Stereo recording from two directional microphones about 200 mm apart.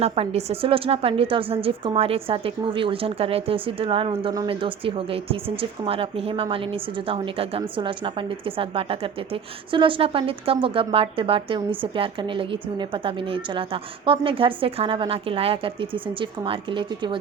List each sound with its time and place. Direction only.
0.0 s a woman's voice: 30° right (ahead or behind)